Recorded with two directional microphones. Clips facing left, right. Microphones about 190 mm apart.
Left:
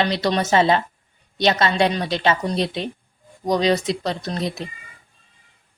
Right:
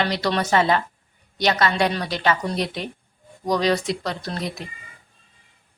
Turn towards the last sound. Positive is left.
turn(degrees=25)  # may be behind; listen again after turning